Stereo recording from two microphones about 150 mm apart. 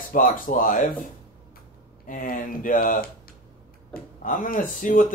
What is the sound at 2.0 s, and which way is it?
Speech, 70° left (ahead or behind).